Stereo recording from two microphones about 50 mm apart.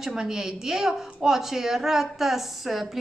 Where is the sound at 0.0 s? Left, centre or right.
Centre.